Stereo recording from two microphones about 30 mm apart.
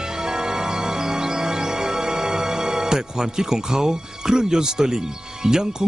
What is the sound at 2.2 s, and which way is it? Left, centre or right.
Speech, right.